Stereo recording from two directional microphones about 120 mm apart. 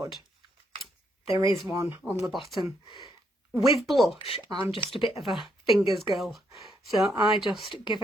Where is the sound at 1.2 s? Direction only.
45° left (ahead or behind).